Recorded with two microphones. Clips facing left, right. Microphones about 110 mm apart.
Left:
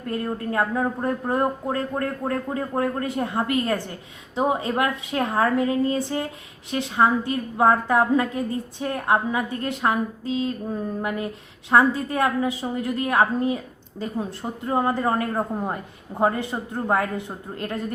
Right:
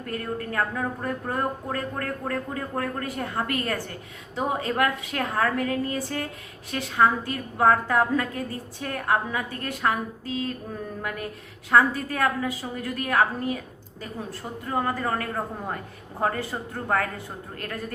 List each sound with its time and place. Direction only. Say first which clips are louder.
0.0 s speech: left 4 dB; 25° left (ahead or behind)